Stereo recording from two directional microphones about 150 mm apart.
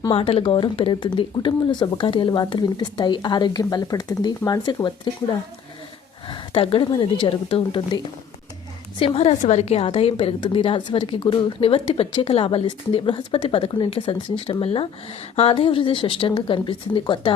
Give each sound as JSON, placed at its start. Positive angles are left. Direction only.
{"t": 0.0, "sound": "a woman's voice", "side_deg": 35}
{"t": 6.2, "sound": "a woman's voice", "side_deg": 35}
{"t": 9.0, "sound": "a woman's voice", "side_deg": 40}